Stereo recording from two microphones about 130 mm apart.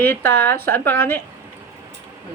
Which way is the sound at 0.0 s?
15° left (ahead or behind).